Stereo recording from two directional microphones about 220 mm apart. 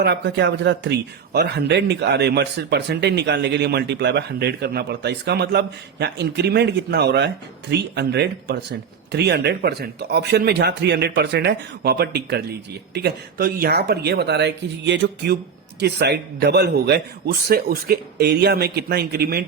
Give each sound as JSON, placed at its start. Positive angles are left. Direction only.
{"t": 0.0, "sound": "speech", "side_deg": -50}